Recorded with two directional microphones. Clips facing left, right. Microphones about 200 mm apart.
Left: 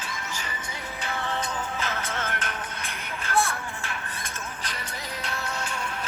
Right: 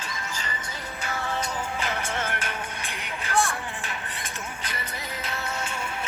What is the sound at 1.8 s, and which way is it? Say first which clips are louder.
Music: right 2 dB; 15° right (ahead or behind).